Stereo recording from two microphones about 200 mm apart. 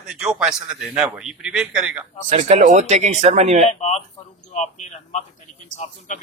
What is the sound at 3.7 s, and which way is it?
A man's voice, 35° left (ahead or behind).